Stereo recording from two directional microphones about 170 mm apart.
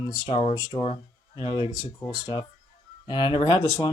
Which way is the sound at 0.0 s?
25° left (ahead or behind).